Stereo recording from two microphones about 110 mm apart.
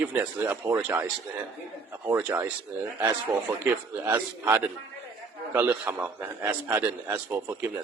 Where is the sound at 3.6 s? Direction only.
15° right (ahead or behind).